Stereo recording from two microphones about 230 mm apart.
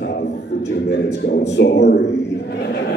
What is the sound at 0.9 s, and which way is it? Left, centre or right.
Speech, left.